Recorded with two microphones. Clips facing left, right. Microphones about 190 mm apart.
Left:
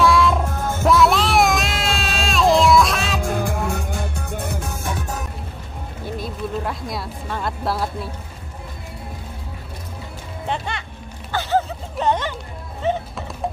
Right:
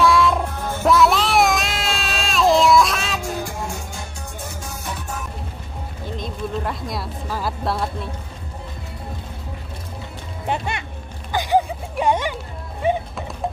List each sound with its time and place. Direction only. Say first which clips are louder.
0.0 s music: even; centre (ahead or behind)
0.8 s child singing: even; centre (ahead or behind)
3.3 s music: left 4 dB; 55° left (ahead or behind)
6.0 s a sound: left 1 dB; 5° left (ahead or behind)
11.3 s dog: right 2 dB; 15° right (ahead or behind)
12.8 s music: right 1 dB; 10° right (ahead or behind)